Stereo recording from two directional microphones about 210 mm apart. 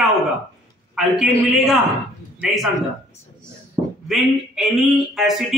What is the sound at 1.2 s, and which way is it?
Speech, centre (ahead or behind).